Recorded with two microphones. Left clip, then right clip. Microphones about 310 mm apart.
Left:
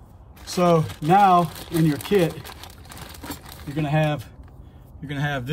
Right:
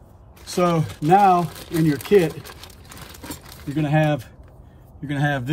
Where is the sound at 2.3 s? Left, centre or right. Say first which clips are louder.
Even; left.